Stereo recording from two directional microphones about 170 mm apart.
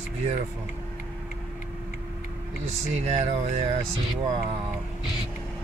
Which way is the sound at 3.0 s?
40° right (ahead or behind).